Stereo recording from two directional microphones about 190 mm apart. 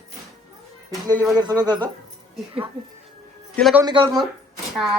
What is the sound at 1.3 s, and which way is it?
Speech, 20° right (ahead or behind).